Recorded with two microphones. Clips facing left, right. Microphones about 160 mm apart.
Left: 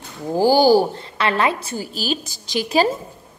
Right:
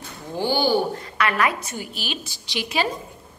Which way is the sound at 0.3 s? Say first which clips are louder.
Left 8 dB; 40° left (ahead or behind).